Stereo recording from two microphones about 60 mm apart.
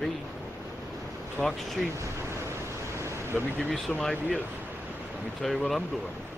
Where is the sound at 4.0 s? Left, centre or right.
Centre.